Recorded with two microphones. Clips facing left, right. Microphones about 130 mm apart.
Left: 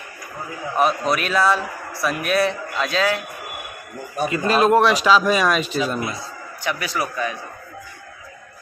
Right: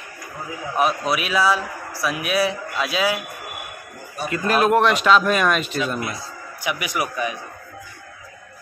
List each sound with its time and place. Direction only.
0.7 s a man's voice: 5° right (ahead or behind)
4.5 s a man's voice: 5° right (ahead or behind)
5.9 s a man's voice: 25° left (ahead or behind)
6.6 s a man's voice: 15° right (ahead or behind)